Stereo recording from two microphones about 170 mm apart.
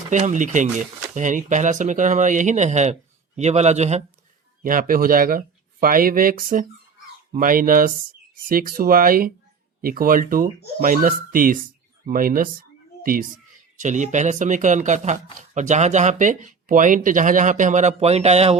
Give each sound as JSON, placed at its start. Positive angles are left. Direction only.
{"t": 0.1, "sound": "speech", "side_deg": -45}
{"t": 4.6, "sound": "speech", "side_deg": -55}
{"t": 13.7, "sound": "speech", "side_deg": -45}